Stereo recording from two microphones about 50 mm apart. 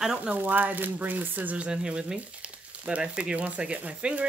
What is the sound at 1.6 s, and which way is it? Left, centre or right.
Speech, centre.